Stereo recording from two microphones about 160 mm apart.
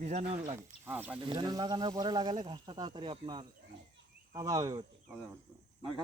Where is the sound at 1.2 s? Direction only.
30° right (ahead or behind).